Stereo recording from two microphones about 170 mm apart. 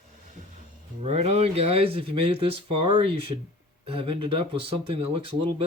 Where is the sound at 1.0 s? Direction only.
40° right (ahead or behind).